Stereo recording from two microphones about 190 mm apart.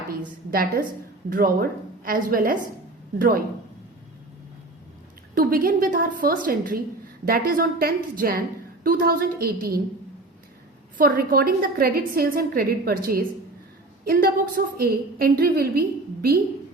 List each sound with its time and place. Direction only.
0.2 s a woman's voice: 45° right (ahead or behind)
5.3 s a woman's voice: 50° right (ahead or behind)
10.9 s a woman's voice: 50° right (ahead or behind)